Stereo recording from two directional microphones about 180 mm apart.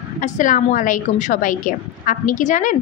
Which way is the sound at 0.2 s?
45° left (ahead or behind).